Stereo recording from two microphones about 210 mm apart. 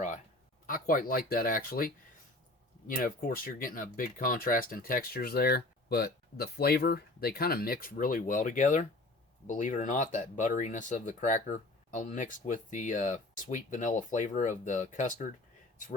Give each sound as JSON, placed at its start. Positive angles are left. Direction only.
{"t": 0.7, "sound": "speech", "side_deg": 40}